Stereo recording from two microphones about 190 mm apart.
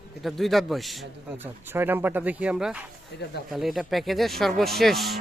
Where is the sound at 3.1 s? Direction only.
60° left (ahead or behind).